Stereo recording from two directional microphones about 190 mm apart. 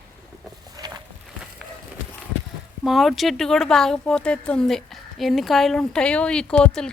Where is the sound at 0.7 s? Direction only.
20° right (ahead or behind).